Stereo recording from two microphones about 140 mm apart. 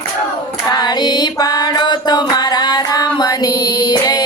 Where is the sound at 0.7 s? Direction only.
30° left (ahead or behind).